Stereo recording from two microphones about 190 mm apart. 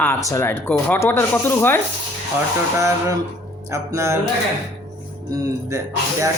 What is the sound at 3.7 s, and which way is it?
Speech, 15° right (ahead or behind).